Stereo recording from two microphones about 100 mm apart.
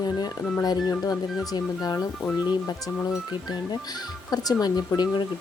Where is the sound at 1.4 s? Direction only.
40° left (ahead or behind).